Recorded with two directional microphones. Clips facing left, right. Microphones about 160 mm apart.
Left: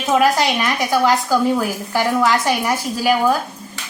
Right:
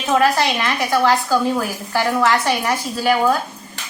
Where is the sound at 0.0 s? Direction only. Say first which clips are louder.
Left 1 dB; 15° left (ahead or behind).